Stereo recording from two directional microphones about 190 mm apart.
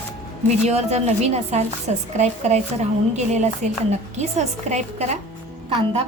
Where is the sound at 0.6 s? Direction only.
35° right (ahead or behind).